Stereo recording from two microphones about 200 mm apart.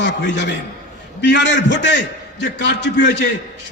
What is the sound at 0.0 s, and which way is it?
A man's voice, 60° left (ahead or behind).